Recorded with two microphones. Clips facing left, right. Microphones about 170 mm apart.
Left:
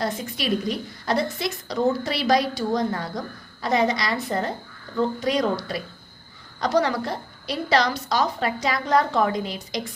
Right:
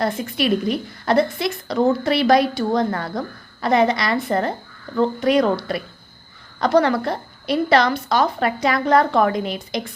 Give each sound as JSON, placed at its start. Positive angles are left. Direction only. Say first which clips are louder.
{"t": 0.0, "sound": "a woman's voice", "louder": "right 6 dB", "side_deg": -55}
{"t": 6.6, "sound": "a woman's voice", "louder": "right 5 dB", "side_deg": -60}